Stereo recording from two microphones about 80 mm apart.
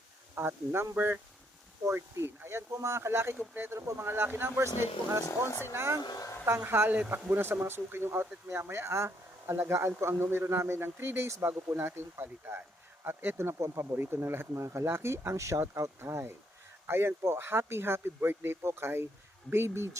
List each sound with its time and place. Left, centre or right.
0.3 s speech: right
5.2 s speech: left
5.7 s speech: right
6.0 s speech: left
6.6 s speech: right